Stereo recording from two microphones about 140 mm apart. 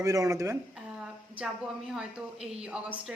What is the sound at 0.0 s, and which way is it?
Speech, 25° right (ahead or behind).